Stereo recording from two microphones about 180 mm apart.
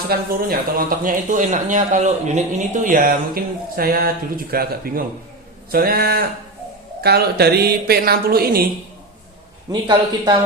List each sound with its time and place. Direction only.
0.1 s a woman's voice: 55° right (ahead or behind)
9.8 s a man's voice: 20° right (ahead or behind)